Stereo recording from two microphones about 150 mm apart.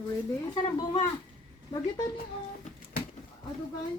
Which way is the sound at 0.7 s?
35° left (ahead or behind).